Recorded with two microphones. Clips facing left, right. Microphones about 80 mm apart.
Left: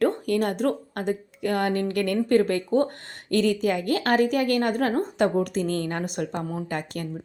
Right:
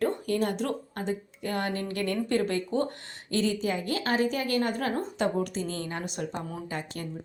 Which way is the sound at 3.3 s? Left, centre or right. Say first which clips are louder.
Left 5 dB; left.